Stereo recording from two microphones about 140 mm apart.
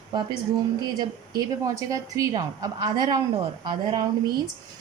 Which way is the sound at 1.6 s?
25° right (ahead or behind).